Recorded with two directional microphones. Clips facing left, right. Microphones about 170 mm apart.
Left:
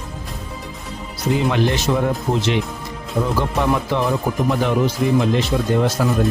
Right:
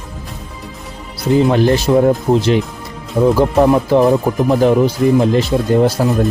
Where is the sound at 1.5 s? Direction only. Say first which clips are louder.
Right 6 dB; 40° right (ahead or behind).